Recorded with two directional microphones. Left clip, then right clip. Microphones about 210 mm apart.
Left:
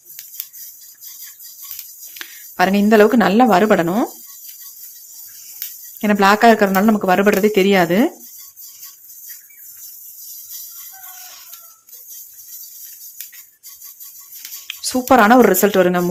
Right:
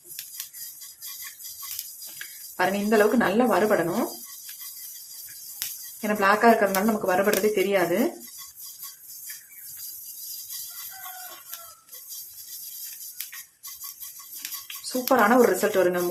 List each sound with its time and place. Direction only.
2.1 s a woman's voice: 50° left (ahead or behind)
6.0 s speech: 50° left (ahead or behind)
15.0 s speech: 50° left (ahead or behind)